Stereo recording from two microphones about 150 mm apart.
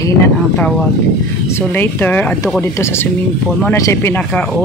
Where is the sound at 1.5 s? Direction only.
15° left (ahead or behind).